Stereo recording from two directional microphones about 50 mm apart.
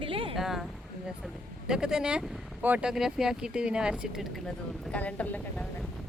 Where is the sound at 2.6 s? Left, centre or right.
Right.